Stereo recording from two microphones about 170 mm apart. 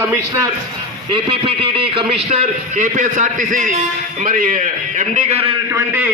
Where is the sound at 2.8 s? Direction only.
50° right (ahead or behind).